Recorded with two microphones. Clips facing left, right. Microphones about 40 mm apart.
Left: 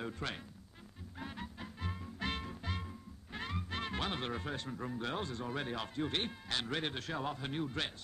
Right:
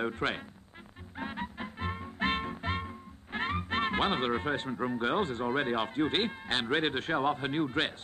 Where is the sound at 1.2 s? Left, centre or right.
Right.